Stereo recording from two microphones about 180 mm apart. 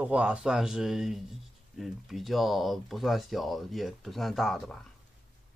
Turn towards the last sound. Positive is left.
turn(degrees=0)  # may be behind; listen again after turning